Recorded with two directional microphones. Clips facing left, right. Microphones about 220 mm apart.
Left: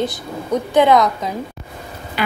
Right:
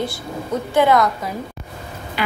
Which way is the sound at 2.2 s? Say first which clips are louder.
Left 2 dB; 45° left (ahead or behind).